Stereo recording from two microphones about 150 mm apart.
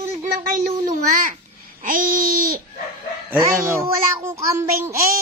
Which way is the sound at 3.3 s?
15° right (ahead or behind).